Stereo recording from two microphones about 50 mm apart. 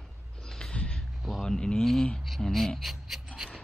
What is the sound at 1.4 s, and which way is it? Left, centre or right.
Speech, centre.